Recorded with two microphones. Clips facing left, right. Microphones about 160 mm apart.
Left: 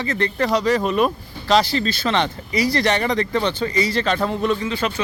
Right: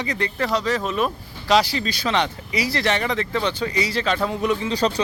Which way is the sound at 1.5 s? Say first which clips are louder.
Left 1 dB; 10° right (ahead or behind).